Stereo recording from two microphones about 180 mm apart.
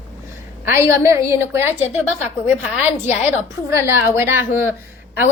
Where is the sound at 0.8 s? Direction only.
15° right (ahead or behind).